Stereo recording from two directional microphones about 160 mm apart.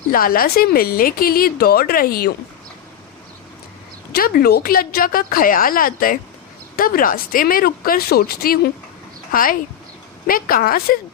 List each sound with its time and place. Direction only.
0.1 s speech: 65° left (ahead or behind)
4.1 s a woman's voice: 70° left (ahead or behind)
9.3 s a woman's voice: 60° left (ahead or behind)